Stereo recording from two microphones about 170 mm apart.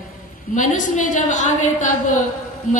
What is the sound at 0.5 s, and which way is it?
A woman's voice, 50° left (ahead or behind).